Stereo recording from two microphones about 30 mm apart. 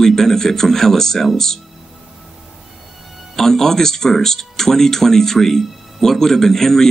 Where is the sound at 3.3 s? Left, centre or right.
Centre.